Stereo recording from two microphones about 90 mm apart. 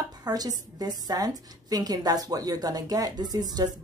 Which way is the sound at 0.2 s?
45° right (ahead or behind).